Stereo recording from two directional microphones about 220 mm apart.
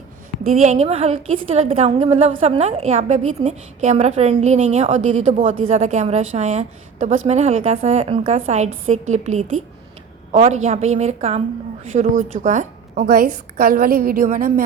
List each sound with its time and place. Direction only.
0.4 s a woman's voice: 30° right (ahead or behind)